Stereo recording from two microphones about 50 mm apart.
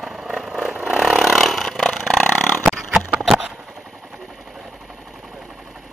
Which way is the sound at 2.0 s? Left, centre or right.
Centre.